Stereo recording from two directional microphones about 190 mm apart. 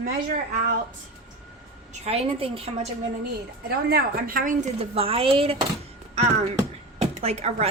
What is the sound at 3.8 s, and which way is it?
Speech, 50° right (ahead or behind).